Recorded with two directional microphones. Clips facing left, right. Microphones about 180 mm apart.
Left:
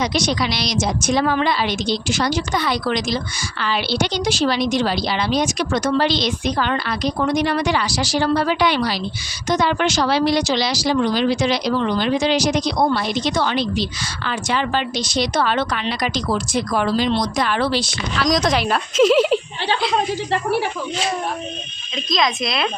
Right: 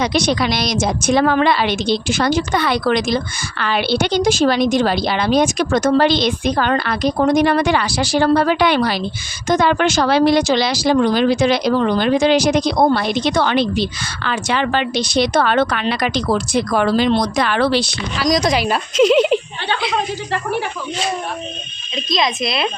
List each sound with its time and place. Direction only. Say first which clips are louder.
0.0 s a woman's voice: right 3 dB; 60° right (ahead or behind)
18.2 s a woman's voice: right 2 dB; centre (ahead or behind)
22.4 s a woman's voice: right 2 dB; 5° right (ahead or behind)